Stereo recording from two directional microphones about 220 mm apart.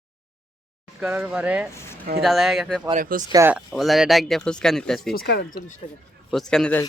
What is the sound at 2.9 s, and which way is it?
Speech, 35° right (ahead or behind).